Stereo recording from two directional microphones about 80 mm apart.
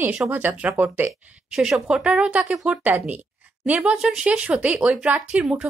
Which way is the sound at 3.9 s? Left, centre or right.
Centre.